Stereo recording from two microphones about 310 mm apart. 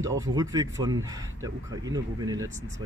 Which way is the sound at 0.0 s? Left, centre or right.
Centre.